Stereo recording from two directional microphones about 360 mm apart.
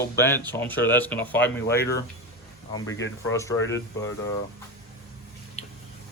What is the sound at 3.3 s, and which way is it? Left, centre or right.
Speech, centre.